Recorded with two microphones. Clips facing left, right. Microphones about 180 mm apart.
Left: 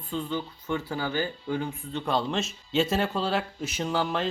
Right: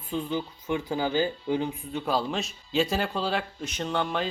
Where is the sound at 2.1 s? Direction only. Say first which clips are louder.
Left 1 dB; centre (ahead or behind).